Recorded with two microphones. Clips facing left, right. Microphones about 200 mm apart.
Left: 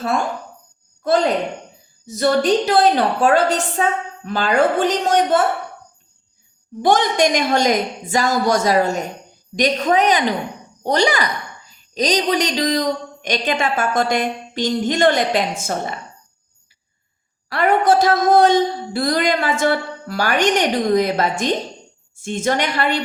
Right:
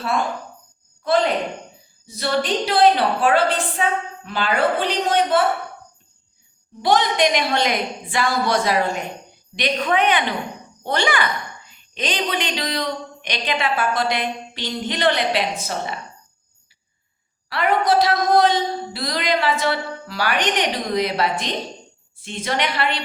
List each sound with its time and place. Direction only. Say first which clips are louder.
2.0 s a woman's voice: left 6 dB; 45° left (ahead or behind)
6.8 s a woman's voice: left 2 dB; 45° left (ahead or behind)
17.5 s a woman's voice: left 3 dB; 45° left (ahead or behind)